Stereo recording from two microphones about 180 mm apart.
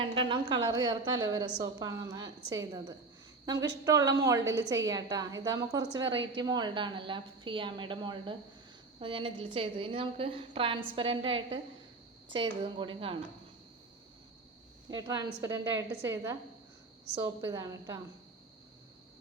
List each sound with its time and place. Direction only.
0.0 s a woman's voice: 30° right (ahead or behind)
14.8 s a woman's voice: 20° right (ahead or behind)
17.4 s a woman's voice: 20° right (ahead or behind)